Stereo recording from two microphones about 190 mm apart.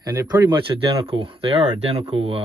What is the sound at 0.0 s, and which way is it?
Speech, 20° right (ahead or behind).